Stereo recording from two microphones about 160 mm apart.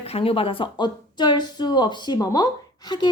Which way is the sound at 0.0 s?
35° left (ahead or behind).